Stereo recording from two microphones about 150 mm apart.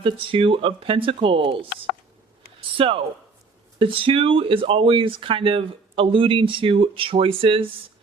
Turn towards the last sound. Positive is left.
turn(degrees=-35)  # may be behind; listen again after turning